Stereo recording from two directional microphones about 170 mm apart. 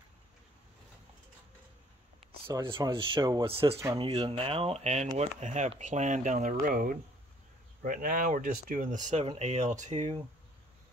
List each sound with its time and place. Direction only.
2.6 s speech: 30° right (ahead or behind)